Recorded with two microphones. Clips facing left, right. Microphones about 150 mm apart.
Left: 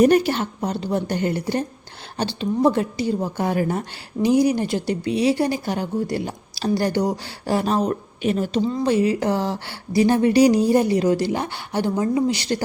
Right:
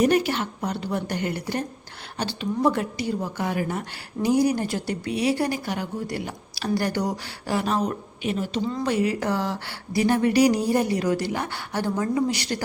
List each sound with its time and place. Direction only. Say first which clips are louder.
0.0 s a woman's voice: left 5 dB; 35° left (ahead or behind)
4.2 s speech: left 3 dB; 20° left (ahead or behind); by 8.6 s 40° left (ahead or behind)
8.7 s speech: left 4 dB; 25° left (ahead or behind)